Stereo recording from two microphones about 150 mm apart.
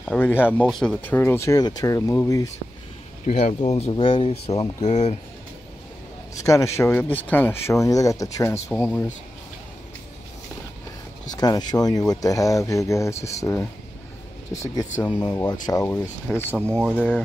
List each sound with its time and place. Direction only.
0.0 s a sound: 10° left (ahead or behind)
0.7 s speech: centre (ahead or behind)
1.0 s speech: 15° left (ahead or behind)
3.3 s speech: 45° left (ahead or behind)
6.4 s speech: 20° left (ahead or behind)
11.3 s speech: 25° left (ahead or behind)
15.8 s speech: 15° left (ahead or behind)
16.6 s speech: 15° right (ahead or behind)
16.9 s speech: 10° left (ahead or behind)